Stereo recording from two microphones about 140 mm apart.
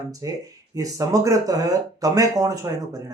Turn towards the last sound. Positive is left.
turn(degrees=-25)  # may be behind; listen again after turning